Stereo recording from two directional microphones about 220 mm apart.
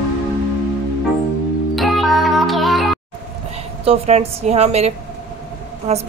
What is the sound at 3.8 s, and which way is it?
A woman's voice, 25° right (ahead or behind).